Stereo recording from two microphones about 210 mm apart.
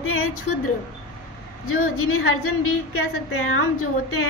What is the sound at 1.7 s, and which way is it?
A woman's voice, 85° left.